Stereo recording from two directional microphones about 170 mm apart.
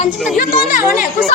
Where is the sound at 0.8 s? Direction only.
10° right (ahead or behind).